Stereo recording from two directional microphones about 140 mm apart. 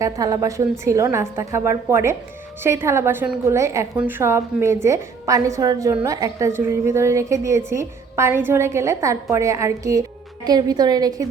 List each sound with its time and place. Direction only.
0.0 s a woman's voice: 25° right (ahead or behind)